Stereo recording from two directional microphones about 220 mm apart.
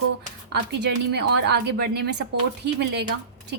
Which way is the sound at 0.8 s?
50° right (ahead or behind).